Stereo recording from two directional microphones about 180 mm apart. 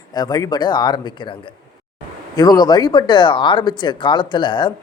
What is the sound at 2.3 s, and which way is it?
Speech, 20° left (ahead or behind).